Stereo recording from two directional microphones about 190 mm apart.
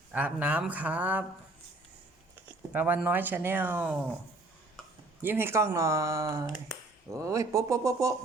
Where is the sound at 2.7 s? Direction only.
10° right (ahead or behind).